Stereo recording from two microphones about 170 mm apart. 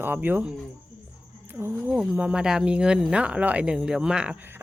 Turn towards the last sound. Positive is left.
turn(degrees=-10)  # may be behind; listen again after turning